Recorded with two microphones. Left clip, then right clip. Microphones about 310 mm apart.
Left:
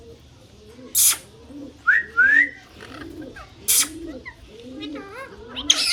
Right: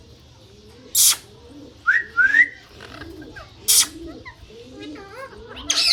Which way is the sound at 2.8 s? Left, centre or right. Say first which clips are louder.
Even; right.